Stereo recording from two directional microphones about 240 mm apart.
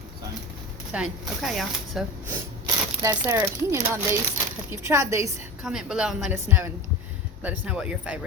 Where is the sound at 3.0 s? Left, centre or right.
Centre.